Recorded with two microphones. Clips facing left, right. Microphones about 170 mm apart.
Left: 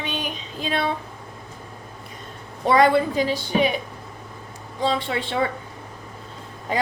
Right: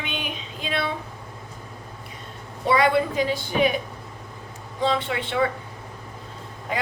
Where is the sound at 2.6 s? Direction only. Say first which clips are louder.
Left 3 dB; 45° left (ahead or behind).